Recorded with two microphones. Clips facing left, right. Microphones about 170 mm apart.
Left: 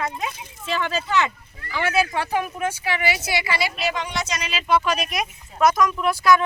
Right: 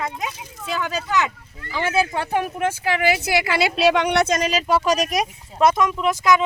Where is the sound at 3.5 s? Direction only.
75° right (ahead or behind); by 6.4 s 20° right (ahead or behind).